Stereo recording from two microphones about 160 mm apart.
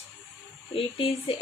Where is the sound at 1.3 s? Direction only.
35° left (ahead or behind).